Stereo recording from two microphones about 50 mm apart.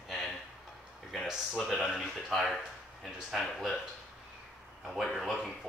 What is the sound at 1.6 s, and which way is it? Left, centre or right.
Speech, centre.